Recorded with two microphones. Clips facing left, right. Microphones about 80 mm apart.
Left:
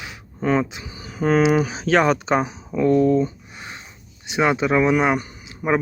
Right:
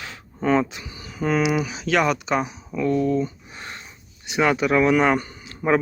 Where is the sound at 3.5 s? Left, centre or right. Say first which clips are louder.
Even; centre.